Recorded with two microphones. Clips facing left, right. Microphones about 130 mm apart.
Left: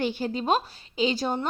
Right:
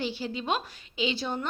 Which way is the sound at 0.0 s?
50° left (ahead or behind).